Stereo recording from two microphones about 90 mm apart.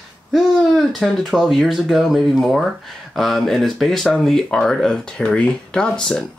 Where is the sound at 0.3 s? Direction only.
Centre (ahead or behind).